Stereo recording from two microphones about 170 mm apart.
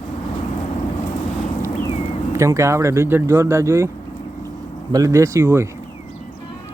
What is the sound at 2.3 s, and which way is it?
Speech, 15° right (ahead or behind).